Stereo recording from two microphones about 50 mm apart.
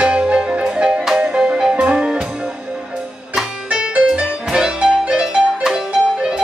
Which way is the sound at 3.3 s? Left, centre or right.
Centre.